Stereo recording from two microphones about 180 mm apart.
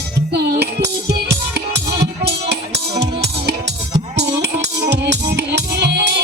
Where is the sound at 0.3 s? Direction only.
65° right (ahead or behind).